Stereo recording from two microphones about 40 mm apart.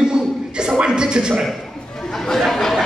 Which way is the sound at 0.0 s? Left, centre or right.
Centre.